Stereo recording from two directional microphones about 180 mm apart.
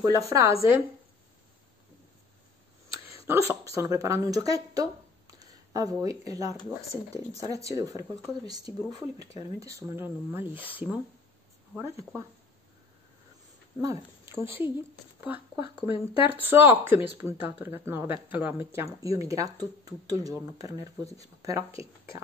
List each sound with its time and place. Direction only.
0.0 s speech: 20° right (ahead or behind)
3.3 s speech: 15° right (ahead or behind)
6.5 s speech: 30° left (ahead or behind)
7.3 s speech: 20° right (ahead or behind)
13.7 s speech: 15° right (ahead or behind)
15.1 s a sound: 10° right (ahead or behind)
15.8 s speech: 10° right (ahead or behind)